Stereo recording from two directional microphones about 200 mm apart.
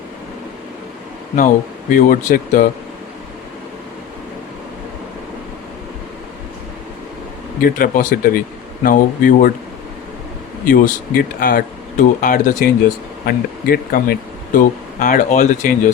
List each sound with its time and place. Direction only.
1.9 s speech: 45° left (ahead or behind)
7.6 s speech: 45° left (ahead or behind)
10.7 s speech: 45° left (ahead or behind)